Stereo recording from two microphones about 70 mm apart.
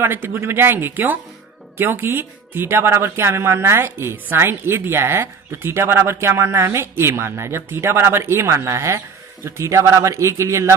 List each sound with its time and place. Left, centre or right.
0.0 s a man's voice: right